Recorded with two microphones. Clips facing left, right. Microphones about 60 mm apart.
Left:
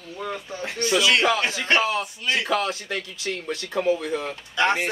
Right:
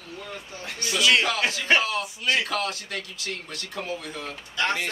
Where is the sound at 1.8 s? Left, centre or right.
Left.